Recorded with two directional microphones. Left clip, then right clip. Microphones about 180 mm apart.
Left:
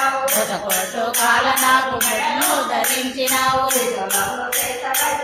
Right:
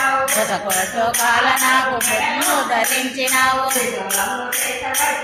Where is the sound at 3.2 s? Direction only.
15° left (ahead or behind).